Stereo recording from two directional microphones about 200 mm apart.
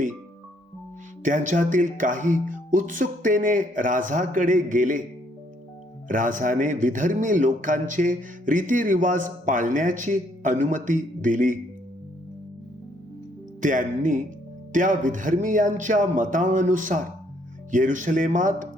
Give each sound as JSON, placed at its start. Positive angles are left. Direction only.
{"t": 1.2, "sound": "a man's voice", "side_deg": -40}
{"t": 6.1, "sound": "a man's voice", "side_deg": -40}
{"t": 13.6, "sound": "a man's voice", "side_deg": -40}